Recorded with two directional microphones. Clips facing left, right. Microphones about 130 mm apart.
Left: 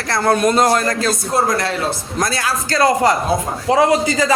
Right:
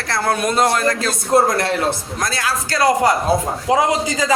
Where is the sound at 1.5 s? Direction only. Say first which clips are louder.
Right 1 dB; 55° right (ahead or behind).